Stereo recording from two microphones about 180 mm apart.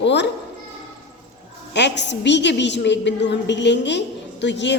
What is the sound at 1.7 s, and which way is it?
A woman's voice, 75° left (ahead or behind).